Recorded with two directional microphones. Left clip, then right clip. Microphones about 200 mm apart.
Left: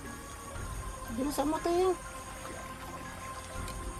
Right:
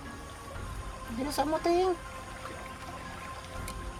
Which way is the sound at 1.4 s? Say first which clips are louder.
Right 3 dB; 40° right (ahead or behind).